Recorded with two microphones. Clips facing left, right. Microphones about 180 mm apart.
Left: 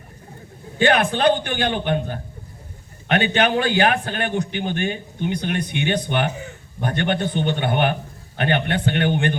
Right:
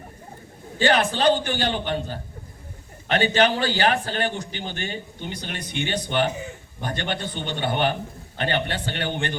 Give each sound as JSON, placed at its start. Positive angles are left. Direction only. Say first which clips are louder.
{"t": 0.8, "sound": "a man's voice", "louder": "left 3 dB", "side_deg": 60}